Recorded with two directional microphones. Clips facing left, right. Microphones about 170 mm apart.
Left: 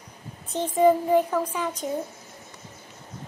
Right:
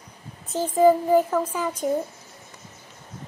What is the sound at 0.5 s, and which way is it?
Child singing, centre (ahead or behind).